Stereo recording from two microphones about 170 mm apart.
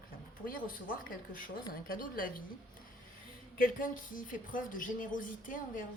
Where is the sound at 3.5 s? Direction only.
55° left (ahead or behind).